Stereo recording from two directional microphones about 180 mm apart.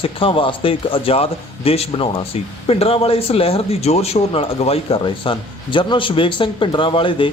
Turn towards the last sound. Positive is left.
turn(degrees=30)  # may be behind; listen again after turning